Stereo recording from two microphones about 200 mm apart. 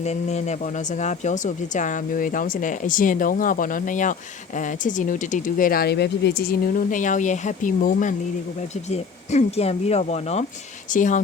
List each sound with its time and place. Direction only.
0.0 s speech: 35° left (ahead or behind)